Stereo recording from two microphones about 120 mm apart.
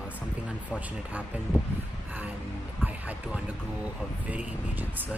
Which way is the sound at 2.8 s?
10° right (ahead or behind).